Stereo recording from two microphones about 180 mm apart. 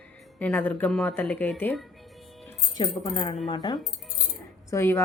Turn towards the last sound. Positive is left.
turn(degrees=15)  # may be behind; listen again after turning